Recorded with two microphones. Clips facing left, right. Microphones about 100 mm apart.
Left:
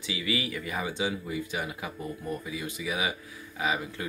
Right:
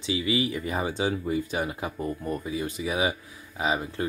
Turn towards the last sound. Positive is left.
turn(degrees=-30)  # may be behind; listen again after turning